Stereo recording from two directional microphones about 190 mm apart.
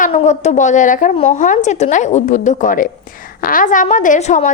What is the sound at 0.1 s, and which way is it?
A woman's voice, 35° left (ahead or behind).